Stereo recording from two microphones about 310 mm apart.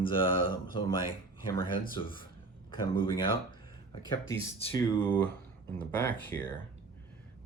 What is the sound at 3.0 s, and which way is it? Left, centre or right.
Speech, centre.